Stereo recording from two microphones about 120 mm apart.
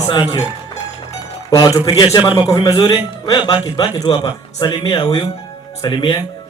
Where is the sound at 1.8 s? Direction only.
30° left (ahead or behind).